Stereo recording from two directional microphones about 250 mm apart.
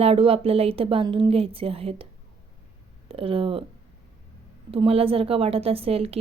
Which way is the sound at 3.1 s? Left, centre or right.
Right.